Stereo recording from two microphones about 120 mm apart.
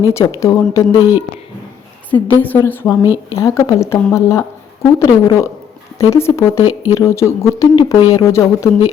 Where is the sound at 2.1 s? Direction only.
15° left (ahead or behind).